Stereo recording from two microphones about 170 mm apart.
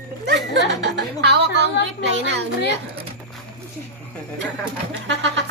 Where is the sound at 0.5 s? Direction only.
90° right.